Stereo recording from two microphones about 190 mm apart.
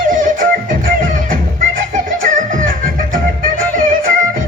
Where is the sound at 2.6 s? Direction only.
45° right (ahead or behind).